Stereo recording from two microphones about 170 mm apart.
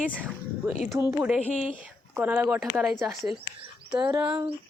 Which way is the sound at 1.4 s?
40° left (ahead or behind).